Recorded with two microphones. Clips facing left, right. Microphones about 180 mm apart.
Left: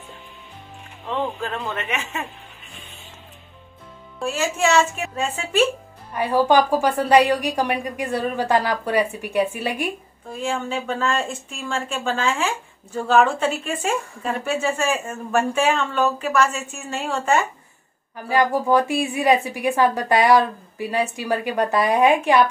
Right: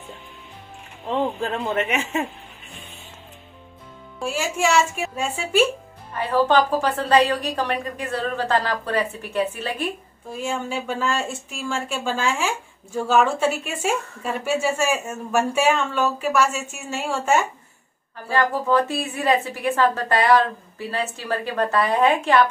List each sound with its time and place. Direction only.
1.4 s speech: 25° right (ahead or behind)
4.2 s a woman's voice: 10° right (ahead or behind)
6.1 s a woman's voice: 15° left (ahead or behind)
10.3 s a woman's voice: 10° right (ahead or behind)
18.1 s a woman's voice: 15° left (ahead or behind)